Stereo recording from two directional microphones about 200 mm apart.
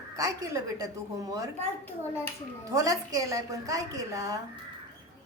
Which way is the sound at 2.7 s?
15° right (ahead or behind).